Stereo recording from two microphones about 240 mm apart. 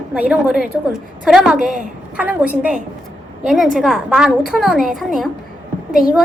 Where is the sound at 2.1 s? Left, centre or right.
Centre.